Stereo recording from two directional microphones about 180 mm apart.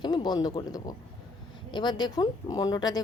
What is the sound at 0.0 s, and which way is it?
Speech, 25° left (ahead or behind).